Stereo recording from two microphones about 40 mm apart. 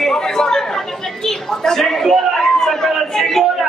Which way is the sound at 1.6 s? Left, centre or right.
Centre.